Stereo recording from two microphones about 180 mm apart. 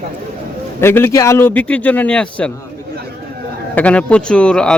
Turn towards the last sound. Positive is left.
turn(degrees=5)  # may be behind; listen again after turning